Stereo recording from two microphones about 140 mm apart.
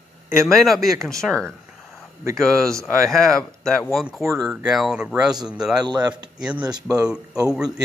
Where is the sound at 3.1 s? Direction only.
Centre (ahead or behind).